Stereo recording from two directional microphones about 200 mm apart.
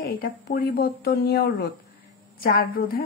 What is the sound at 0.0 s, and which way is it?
Speech, 45° left (ahead or behind).